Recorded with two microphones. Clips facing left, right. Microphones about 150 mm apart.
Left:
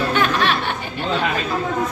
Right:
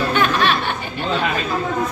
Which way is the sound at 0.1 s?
5° right (ahead or behind).